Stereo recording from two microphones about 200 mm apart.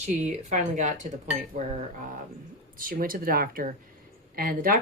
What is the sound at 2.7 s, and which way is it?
Speech, 45° right (ahead or behind).